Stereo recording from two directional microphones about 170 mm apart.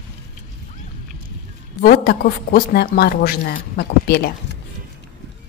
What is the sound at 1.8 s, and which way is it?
Speech, 65° left (ahead or behind).